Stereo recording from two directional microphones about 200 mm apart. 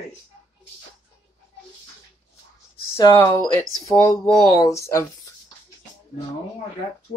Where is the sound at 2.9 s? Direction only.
15° left (ahead or behind).